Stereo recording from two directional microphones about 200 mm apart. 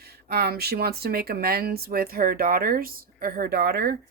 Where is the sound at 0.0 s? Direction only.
50° right (ahead or behind).